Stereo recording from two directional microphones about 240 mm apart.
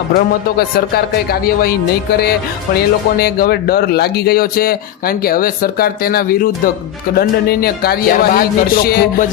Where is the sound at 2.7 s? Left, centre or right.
Left.